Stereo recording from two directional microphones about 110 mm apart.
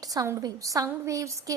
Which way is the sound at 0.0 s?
35° right (ahead or behind).